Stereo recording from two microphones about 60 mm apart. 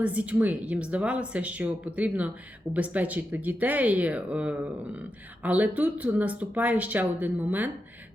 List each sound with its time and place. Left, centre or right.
0.0 s speech: right